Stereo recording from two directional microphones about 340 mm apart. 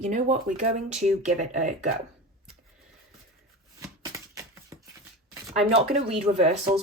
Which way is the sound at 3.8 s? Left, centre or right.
Centre.